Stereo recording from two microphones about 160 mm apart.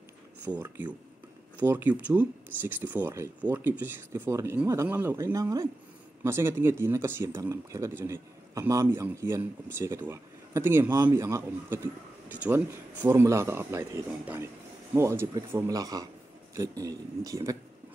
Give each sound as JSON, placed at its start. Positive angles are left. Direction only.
{"t": 0.6, "sound": "speech", "side_deg": -10}